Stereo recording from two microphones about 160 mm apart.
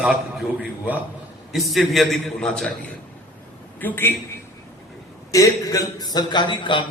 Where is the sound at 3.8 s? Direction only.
10° left (ahead or behind).